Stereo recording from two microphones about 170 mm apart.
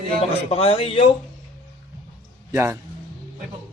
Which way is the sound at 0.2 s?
35° left (ahead or behind).